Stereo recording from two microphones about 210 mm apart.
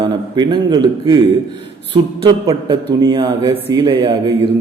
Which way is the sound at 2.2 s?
20° right (ahead or behind).